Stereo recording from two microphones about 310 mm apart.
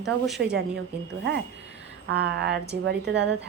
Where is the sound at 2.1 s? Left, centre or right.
Right.